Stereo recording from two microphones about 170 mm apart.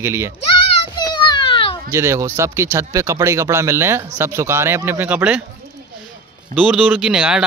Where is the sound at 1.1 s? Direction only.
30° left (ahead or behind).